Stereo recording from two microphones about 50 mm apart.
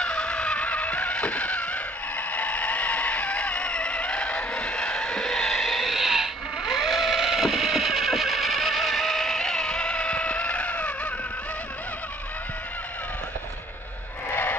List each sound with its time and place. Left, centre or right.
0.0 s music: left